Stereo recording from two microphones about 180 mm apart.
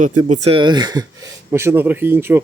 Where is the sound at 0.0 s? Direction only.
45° right (ahead or behind).